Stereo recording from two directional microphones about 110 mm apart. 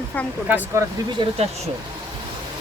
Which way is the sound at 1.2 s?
45° right (ahead or behind).